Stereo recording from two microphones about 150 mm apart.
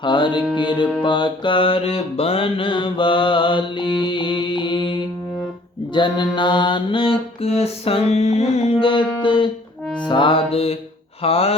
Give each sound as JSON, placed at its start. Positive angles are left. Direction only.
{"t": 0.0, "sound": "mantra", "side_deg": 30}